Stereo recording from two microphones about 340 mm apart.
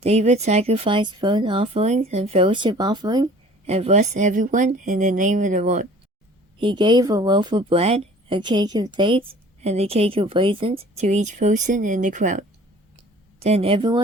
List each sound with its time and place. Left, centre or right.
0.0 s speech: centre